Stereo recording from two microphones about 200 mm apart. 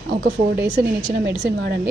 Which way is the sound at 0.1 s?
55° right (ahead or behind).